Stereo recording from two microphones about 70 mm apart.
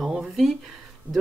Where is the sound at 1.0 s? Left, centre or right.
Right.